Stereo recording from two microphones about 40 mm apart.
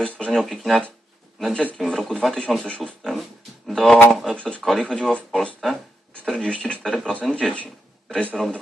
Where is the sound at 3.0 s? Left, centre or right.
Centre.